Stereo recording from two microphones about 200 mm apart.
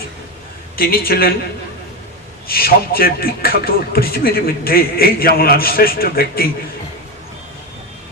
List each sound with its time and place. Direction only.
0.8 s speech: 50° left (ahead or behind)
2.5 s speech: 50° left (ahead or behind)